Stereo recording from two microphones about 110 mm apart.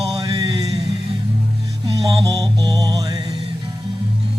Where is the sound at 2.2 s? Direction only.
35° right (ahead or behind).